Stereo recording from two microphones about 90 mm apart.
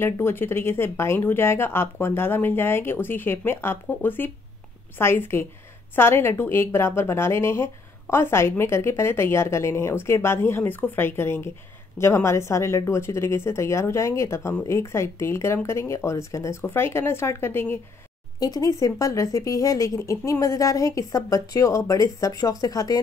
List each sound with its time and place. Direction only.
0.0 s a woman's voice: 25° left (ahead or behind)
18.4 s speech: 40° left (ahead or behind)